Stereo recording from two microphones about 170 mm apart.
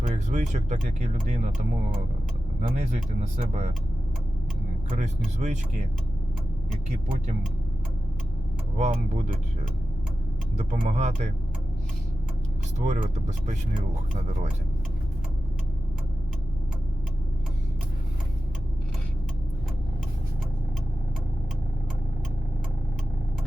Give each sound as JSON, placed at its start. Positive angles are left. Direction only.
{"t": 0.0, "sound": "speech", "side_deg": -45}
{"t": 4.9, "sound": "speech", "side_deg": -40}
{"t": 8.7, "sound": "speech", "side_deg": -40}
{"t": 10.6, "sound": "speech", "side_deg": -40}
{"t": 12.8, "sound": "speech", "side_deg": -45}